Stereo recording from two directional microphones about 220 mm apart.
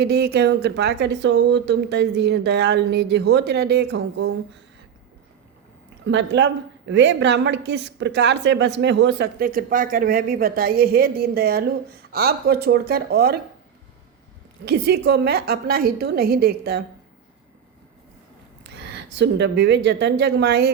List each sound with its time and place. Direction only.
0.0 s a woman's voice: 45° right (ahead or behind)
6.1 s a woman's voice: 55° right (ahead or behind)
14.6 s a woman's voice: 50° right (ahead or behind)
18.6 s speech: 50° right (ahead or behind)